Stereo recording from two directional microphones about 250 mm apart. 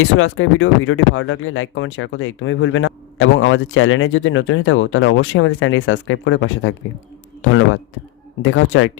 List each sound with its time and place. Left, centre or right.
0.0 s speech: left
8.4 s speech: left